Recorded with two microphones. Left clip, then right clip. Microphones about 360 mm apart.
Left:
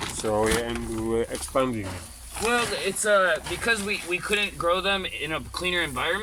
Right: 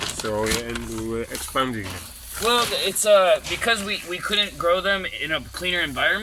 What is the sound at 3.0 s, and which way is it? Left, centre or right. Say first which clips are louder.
Speech: right 5 dB; right.